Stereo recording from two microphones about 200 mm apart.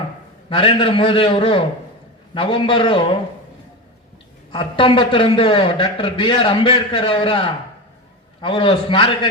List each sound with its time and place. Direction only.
0.5 s a man's voice: 25° left (ahead or behind)
4.5 s a man's voice: 25° left (ahead or behind)